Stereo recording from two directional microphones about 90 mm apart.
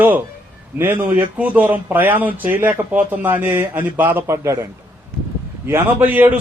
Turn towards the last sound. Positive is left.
turn(degrees=-20)  # may be behind; listen again after turning